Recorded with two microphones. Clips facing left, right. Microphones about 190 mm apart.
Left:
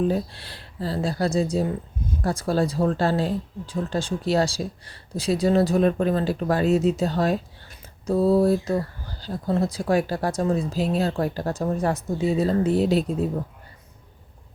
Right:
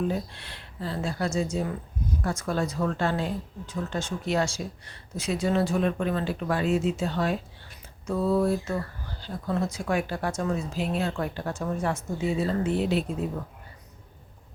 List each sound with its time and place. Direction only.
0.1 s speech: 35° left (ahead or behind)